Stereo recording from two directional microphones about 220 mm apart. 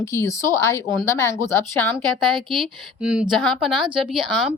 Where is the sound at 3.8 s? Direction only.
25° right (ahead or behind).